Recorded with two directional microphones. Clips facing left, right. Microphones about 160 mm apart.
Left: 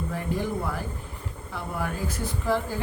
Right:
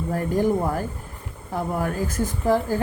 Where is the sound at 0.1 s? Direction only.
45° right (ahead or behind).